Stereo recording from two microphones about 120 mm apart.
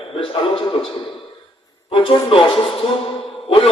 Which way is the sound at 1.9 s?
45° left (ahead or behind).